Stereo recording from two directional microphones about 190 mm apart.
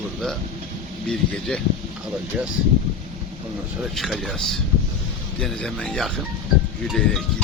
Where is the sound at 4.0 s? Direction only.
Centre (ahead or behind).